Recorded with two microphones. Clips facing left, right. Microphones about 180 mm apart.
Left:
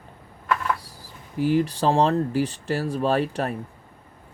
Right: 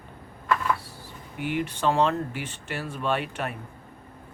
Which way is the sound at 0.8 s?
35° left (ahead or behind).